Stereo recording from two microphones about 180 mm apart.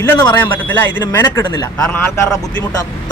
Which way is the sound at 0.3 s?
10° left (ahead or behind).